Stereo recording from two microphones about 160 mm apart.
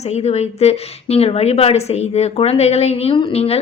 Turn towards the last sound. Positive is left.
turn(degrees=40)  # may be behind; listen again after turning